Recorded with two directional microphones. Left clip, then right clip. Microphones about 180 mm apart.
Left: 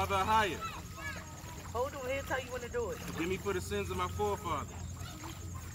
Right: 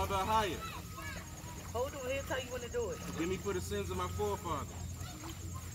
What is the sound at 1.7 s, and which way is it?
Speech, 30° right (ahead or behind).